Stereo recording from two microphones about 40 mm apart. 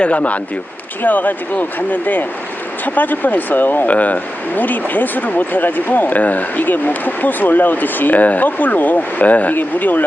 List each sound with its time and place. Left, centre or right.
0.0 s speech: left
1.0 s speech: left
9.6 s speech: left